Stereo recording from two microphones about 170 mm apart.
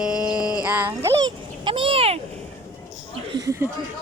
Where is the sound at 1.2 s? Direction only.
30° right (ahead or behind).